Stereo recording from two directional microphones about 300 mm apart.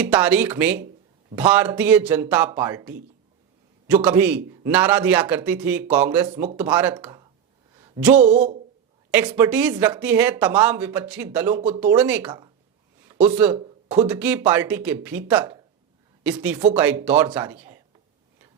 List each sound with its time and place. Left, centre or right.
0.0 s speech: centre; by 8.5 s right
9.1 s speech: centre
14.1 s speech: centre